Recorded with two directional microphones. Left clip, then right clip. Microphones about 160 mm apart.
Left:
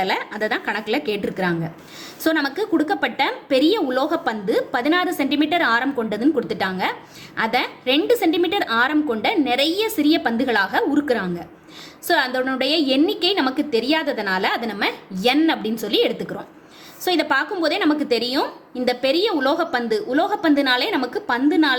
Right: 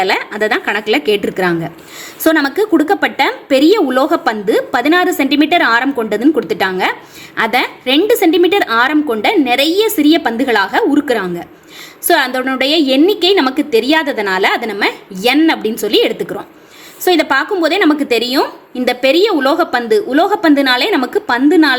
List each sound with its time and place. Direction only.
0.0 s a woman's voice: 40° right (ahead or behind)